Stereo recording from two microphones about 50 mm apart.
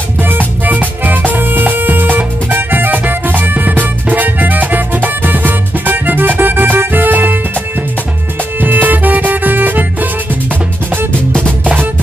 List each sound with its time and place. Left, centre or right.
0.2 s music: right
8.5 s music: right
11.6 s music: right